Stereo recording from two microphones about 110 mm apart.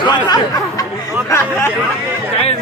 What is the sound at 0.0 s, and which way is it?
Speech, 45° left (ahead or behind).